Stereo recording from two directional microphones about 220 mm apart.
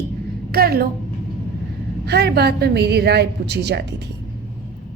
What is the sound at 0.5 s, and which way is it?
Speech, 45° right (ahead or behind).